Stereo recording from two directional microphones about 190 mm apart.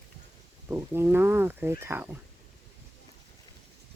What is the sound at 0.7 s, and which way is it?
Speech, 15° right (ahead or behind).